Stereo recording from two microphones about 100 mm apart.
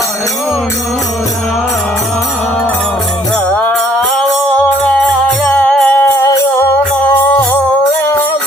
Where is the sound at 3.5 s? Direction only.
15° left (ahead or behind).